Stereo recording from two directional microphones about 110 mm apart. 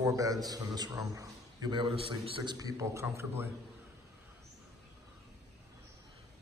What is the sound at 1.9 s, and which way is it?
Speech, 60° right (ahead or behind).